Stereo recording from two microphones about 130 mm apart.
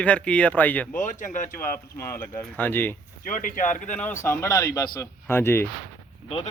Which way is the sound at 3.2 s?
90° left.